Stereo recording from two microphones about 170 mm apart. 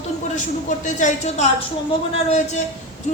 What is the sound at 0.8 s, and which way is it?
A woman's voice, 45° left (ahead or behind).